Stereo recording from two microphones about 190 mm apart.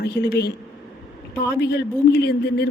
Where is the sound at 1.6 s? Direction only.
60° left (ahead or behind).